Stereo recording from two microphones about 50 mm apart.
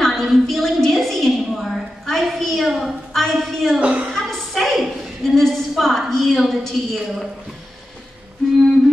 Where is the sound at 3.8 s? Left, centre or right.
Right.